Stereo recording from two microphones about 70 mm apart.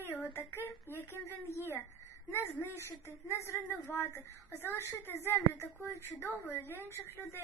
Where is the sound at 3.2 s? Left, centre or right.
Left.